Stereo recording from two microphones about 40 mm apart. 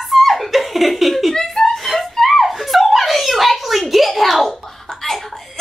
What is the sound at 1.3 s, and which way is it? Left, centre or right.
Chuckle, centre.